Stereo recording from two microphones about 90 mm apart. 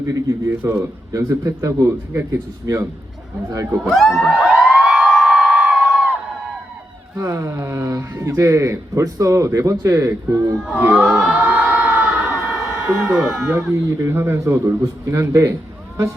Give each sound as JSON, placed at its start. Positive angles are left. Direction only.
{"t": 0.1, "sound": "a man's voice", "side_deg": -35}
{"t": 3.8, "sound": "speech", "side_deg": 0}
{"t": 4.3, "sound": "a sound", "side_deg": -10}
{"t": 7.2, "sound": "a man's voice", "side_deg": -35}
{"t": 10.7, "sound": "crowd", "side_deg": -15}
{"t": 11.0, "sound": "speech", "side_deg": -5}
{"t": 11.3, "sound": "crowd", "side_deg": -20}
{"t": 12.7, "sound": "speech", "side_deg": -10}
{"t": 13.4, "sound": "a man's voice", "side_deg": -30}